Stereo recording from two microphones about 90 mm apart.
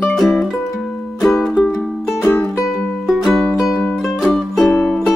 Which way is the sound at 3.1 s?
Centre (ahead or behind).